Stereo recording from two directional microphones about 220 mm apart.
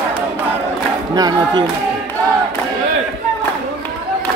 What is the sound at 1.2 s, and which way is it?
Speech, 20° right (ahead or behind).